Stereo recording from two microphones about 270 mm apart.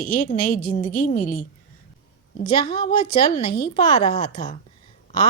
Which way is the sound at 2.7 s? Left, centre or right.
Centre.